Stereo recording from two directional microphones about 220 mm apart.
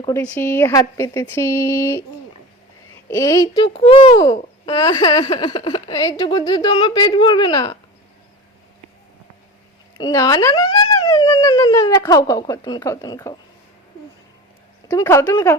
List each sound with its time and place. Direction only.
0.0 s speech: 15° left (ahead or behind)
3.1 s speech: 15° left (ahead or behind)
10.0 s speech: 15° left (ahead or behind)
14.8 s speech: 15° left (ahead or behind)